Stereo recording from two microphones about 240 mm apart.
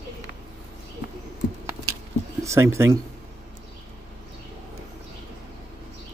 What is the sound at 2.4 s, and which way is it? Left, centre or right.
Speech, centre.